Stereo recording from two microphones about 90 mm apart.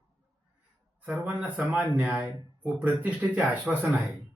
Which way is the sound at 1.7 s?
5° right (ahead or behind).